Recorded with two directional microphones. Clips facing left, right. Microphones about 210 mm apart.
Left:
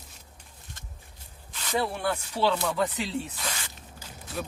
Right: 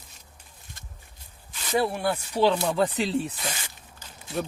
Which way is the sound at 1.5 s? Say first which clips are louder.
Right 4 dB; 10° right (ahead or behind).